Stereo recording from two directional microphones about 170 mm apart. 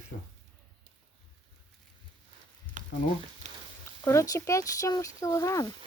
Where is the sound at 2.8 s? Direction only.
50° right (ahead or behind).